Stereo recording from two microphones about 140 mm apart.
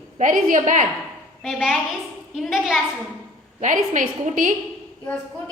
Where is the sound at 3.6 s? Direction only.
65° right (ahead or behind).